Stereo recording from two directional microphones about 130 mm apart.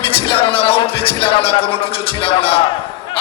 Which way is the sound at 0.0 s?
45° left (ahead or behind).